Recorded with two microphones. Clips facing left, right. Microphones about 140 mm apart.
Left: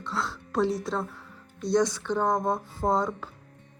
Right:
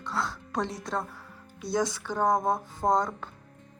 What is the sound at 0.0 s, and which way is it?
Speech, centre (ahead or behind).